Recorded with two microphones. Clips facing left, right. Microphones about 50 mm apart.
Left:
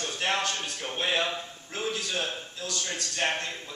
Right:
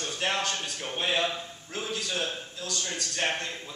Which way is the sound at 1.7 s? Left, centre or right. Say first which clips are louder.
Left 2 dB; left.